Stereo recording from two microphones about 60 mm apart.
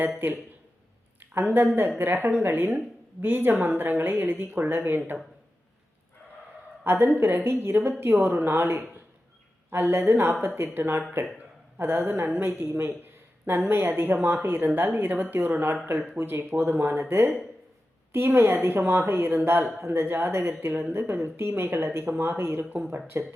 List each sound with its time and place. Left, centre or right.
1.2 s a woman's voice: right
6.8 s a woman's voice: right